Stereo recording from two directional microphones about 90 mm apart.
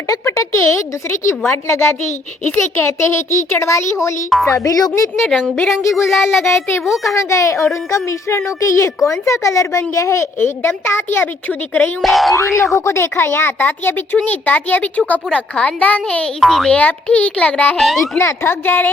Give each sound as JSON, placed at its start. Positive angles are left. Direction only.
{"t": 0.1, "sound": "a woman's voice", "side_deg": 35}
{"t": 4.6, "sound": "speech", "side_deg": 40}
{"t": 5.2, "sound": "speech", "side_deg": -5}
{"t": 6.4, "sound": "a woman's voice", "side_deg": 30}
{"t": 6.8, "sound": "speech", "side_deg": -5}
{"t": 7.1, "sound": "a woman's voice", "side_deg": 35}
{"t": 12.0, "sound": "speech", "side_deg": 0}
{"t": 12.7, "sound": "speech", "side_deg": 30}
{"t": 16.4, "sound": "speech", "side_deg": 5}
{"t": 16.7, "sound": "speech", "side_deg": 15}
{"t": 17.7, "sound": "speech", "side_deg": 0}
{"t": 18.2, "sound": "a woman's voice", "side_deg": 25}